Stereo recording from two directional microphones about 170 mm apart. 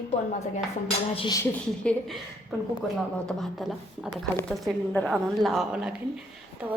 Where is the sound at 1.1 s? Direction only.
30° left (ahead or behind).